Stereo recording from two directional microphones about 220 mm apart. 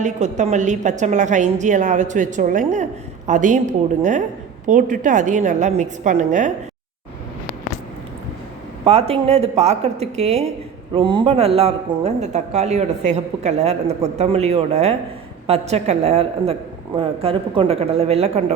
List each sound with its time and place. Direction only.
0.0 s a woman's voice: 30° right (ahead or behind)
8.8 s speech: 25° right (ahead or behind)